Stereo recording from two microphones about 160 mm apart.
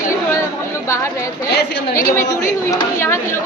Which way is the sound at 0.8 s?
20° left (ahead or behind).